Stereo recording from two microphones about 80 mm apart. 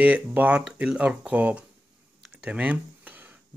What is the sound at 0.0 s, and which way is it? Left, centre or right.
Speech, centre.